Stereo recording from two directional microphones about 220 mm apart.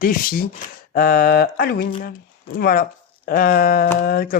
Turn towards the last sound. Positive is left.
turn(degrees=40)  # may be behind; listen again after turning